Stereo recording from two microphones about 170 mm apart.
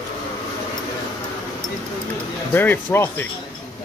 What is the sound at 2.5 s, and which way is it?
Speech, 10° left (ahead or behind).